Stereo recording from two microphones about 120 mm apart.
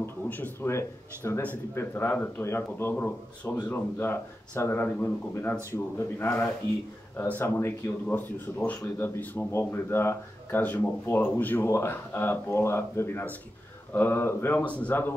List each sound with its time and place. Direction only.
0.0 s speech: 15° left (ahead or behind)